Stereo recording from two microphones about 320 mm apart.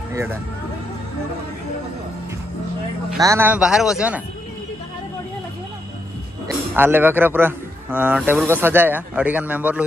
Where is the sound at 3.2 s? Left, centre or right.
Centre.